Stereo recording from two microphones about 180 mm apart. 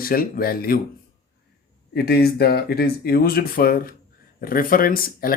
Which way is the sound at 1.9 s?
60° left (ahead or behind).